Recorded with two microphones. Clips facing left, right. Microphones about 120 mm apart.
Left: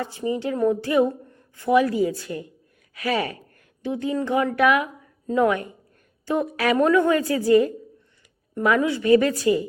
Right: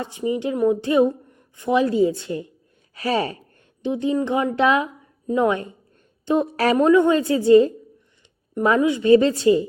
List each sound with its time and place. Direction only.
0.0 s a woman's voice: 20° right (ahead or behind)